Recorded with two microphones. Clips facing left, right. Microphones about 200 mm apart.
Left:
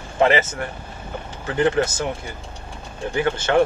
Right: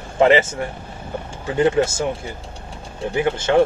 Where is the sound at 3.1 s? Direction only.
20° right (ahead or behind).